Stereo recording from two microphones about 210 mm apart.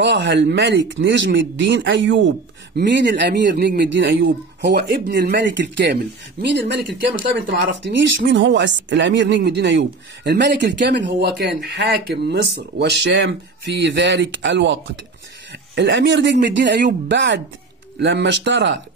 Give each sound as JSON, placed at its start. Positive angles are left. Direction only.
{"t": 0.0, "sound": "speech", "side_deg": -60}
{"t": 6.4, "sound": "speech", "side_deg": -45}
{"t": 7.2, "sound": "speech", "side_deg": -60}